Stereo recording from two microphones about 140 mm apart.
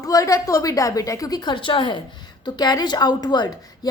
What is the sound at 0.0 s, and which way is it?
A woman's voice, 25° left (ahead or behind).